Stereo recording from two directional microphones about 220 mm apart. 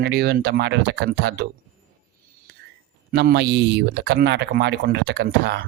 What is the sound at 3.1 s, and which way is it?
Speech, 50° right (ahead or behind).